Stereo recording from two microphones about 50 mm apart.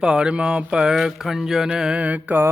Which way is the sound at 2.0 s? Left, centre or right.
Right.